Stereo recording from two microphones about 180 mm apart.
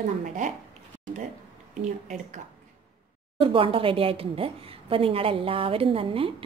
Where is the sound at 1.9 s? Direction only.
45° right (ahead or behind).